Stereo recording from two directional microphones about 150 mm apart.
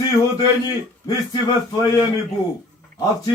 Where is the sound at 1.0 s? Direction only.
30° left (ahead or behind).